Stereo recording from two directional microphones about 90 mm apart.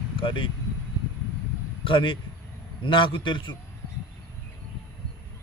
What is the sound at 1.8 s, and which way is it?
Speech, 75° left (ahead or behind).